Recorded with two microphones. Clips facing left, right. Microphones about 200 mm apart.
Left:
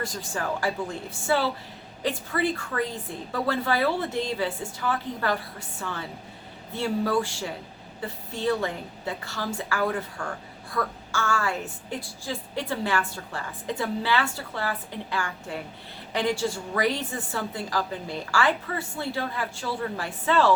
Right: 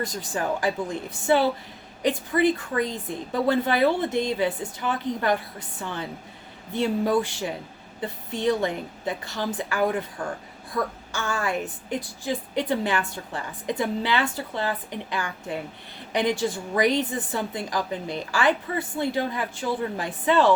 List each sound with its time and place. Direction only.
0.0 s a woman's voice: 20° right (ahead or behind)